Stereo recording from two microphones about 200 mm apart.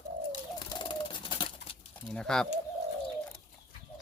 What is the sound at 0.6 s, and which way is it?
Bird, 20° left (ahead or behind).